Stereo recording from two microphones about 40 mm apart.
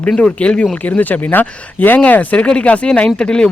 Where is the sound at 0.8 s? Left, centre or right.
Left.